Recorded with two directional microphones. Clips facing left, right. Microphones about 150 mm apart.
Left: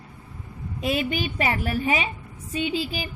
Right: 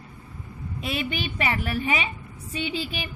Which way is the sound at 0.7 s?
40° left (ahead or behind).